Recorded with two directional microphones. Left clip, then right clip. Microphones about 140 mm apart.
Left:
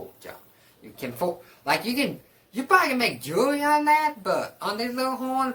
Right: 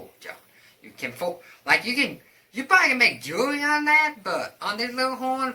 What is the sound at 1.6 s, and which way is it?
Speech, 35° left (ahead or behind).